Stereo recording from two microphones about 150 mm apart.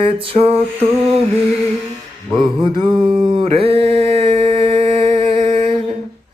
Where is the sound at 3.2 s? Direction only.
35° right (ahead or behind).